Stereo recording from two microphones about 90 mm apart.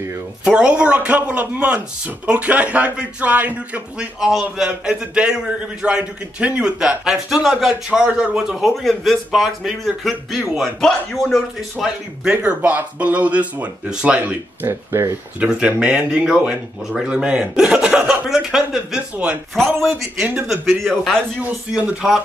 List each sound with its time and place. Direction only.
0.5 s a man's voice: 15° right (ahead or behind); by 11.4 s 5° left (ahead or behind)
11.7 s a man's voice: 10° right (ahead or behind)
14.7 s speech: 30° right (ahead or behind)
15.4 s a man's voice: 10° right (ahead or behind)
19.5 s a man's voice: 5° left (ahead or behind)
21.4 s a man's voice: 10° right (ahead or behind)